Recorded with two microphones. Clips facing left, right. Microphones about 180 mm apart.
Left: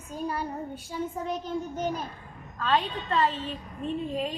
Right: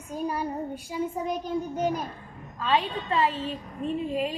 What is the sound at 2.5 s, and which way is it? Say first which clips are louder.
A child's voice: right 1 dB; 5° right (ahead or behind).